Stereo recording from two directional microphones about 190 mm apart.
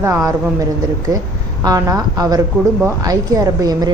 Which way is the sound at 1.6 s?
20° right (ahead or behind).